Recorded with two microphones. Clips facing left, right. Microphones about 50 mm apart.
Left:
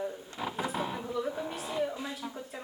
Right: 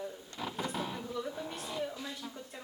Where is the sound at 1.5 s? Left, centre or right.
Centre.